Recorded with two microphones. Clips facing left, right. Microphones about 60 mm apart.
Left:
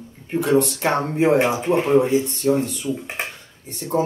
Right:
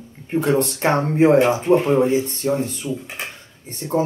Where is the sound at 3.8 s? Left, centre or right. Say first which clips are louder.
Right 1 dB; centre.